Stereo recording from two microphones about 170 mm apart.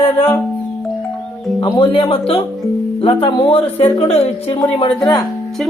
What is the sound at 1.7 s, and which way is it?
Speech, 35° left (ahead or behind).